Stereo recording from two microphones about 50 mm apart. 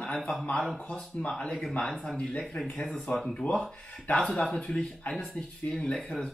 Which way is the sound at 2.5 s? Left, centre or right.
Centre.